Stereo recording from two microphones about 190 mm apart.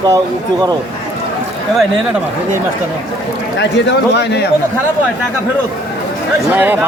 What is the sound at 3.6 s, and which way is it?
Speech, 65° left (ahead or behind).